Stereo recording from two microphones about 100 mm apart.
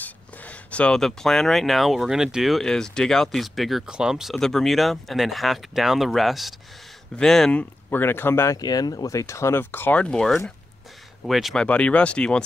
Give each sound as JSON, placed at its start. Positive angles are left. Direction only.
{"t": 0.0, "sound": "speech", "side_deg": 15}
{"t": 7.9, "sound": "speech", "side_deg": 20}
{"t": 8.5, "sound": "speech", "side_deg": 40}
{"t": 11.5, "sound": "speech", "side_deg": 10}